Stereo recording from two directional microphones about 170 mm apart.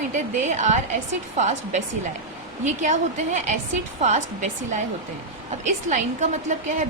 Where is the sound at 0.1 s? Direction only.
45° right (ahead or behind).